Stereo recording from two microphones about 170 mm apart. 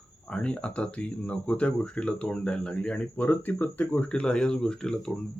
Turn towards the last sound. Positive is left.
turn(degrees=5)  # may be behind; listen again after turning